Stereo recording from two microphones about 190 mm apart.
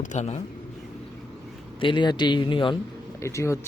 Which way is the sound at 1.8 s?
25° left (ahead or behind).